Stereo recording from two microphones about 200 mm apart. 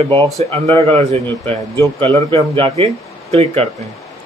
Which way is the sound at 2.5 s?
25° right (ahead or behind).